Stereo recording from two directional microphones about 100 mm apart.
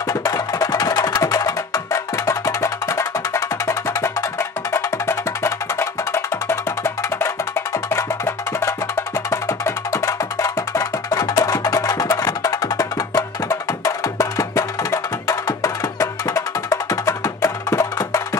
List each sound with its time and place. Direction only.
0.1 s music: 35° left (ahead or behind)
9.3 s music: 30° left (ahead or behind)